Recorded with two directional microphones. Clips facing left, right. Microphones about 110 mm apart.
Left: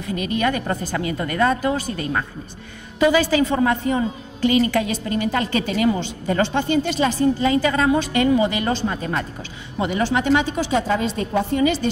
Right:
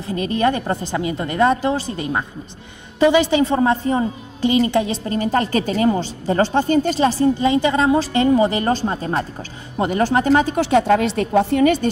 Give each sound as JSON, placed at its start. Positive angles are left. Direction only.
{"t": 0.0, "sound": "a woman's voice", "side_deg": -30}
{"t": 9.8, "sound": "speech", "side_deg": -45}
{"t": 10.5, "sound": "a woman's voice", "side_deg": -60}